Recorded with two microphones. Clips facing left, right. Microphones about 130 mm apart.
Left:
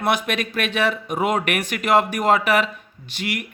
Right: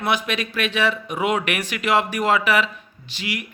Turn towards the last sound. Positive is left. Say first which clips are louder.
# left 2 dB
turn(degrees=50)  # may be behind; listen again after turning